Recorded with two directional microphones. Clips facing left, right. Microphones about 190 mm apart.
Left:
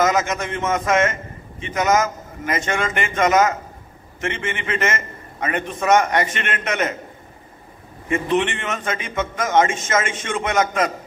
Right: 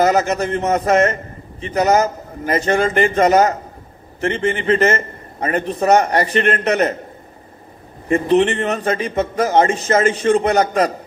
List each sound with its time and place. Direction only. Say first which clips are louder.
0.0 s a man's voice: right 4 dB; 35° right (ahead or behind)
8.1 s a man's voice: right 6 dB; 35° right (ahead or behind)